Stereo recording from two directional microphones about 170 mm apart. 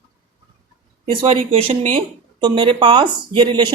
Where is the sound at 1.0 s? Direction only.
35° right (ahead or behind).